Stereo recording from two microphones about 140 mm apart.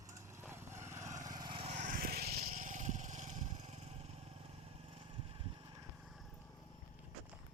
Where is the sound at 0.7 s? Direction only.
60° right (ahead or behind).